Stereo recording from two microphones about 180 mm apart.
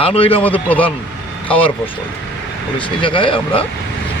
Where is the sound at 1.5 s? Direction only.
30° left (ahead or behind).